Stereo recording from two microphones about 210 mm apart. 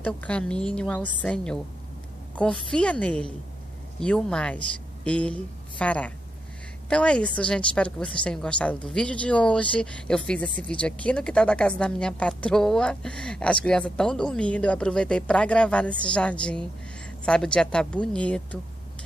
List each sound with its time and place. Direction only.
0.0 s a woman's voice: 5° left (ahead or behind)